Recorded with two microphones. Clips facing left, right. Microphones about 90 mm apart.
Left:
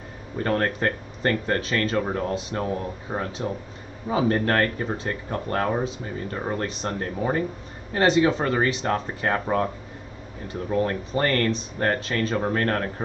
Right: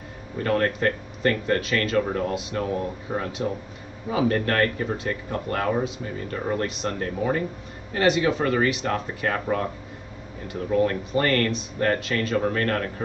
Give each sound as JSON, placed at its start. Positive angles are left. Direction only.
{"t": 0.4, "sound": "speech", "side_deg": 30}
{"t": 4.1, "sound": "speech", "side_deg": 30}
{"t": 10.8, "sound": "speech", "side_deg": 30}